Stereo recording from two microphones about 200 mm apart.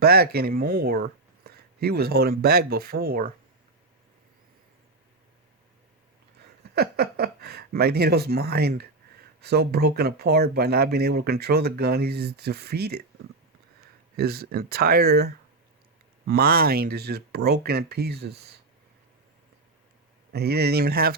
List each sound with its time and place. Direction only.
0.0 s speech: 50° right (ahead or behind)
6.7 s speech: 50° right (ahead or behind)
14.2 s speech: 50° right (ahead or behind)
20.3 s speech: 55° right (ahead or behind)